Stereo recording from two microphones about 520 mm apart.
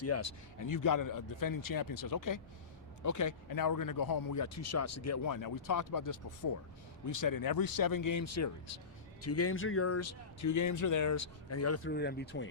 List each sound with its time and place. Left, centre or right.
0.0 s speech: left